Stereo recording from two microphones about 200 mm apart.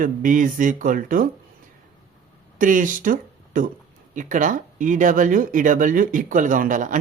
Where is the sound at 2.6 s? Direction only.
40° right (ahead or behind).